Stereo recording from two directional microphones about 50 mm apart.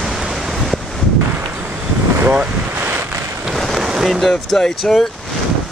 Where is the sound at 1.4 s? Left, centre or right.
Right.